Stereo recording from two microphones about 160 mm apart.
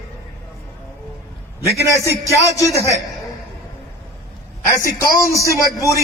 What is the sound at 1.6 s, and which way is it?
Speech, 20° right (ahead or behind).